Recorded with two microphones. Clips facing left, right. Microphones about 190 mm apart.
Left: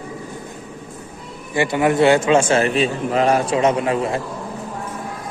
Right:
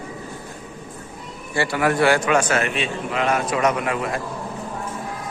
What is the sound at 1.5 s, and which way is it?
A man's voice, 20° left (ahead or behind).